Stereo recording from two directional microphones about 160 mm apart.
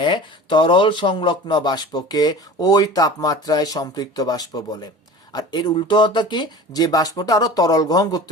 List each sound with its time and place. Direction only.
0.0 s speech: 30° left (ahead or behind)